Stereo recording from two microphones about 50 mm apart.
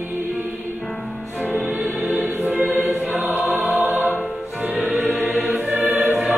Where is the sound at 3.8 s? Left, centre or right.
Right.